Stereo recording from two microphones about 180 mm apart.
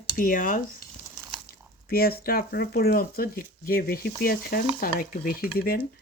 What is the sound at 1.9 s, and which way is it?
Speech, 55° left (ahead or behind).